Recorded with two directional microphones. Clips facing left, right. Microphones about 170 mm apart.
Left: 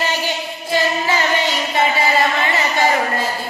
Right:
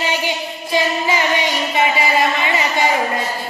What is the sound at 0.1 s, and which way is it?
Music, 15° right (ahead or behind).